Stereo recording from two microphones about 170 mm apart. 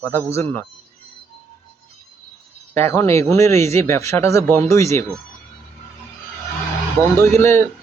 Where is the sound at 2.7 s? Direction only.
15° left (ahead or behind).